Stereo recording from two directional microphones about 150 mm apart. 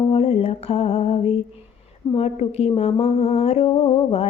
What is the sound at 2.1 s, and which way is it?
Speech, 45° left (ahead or behind).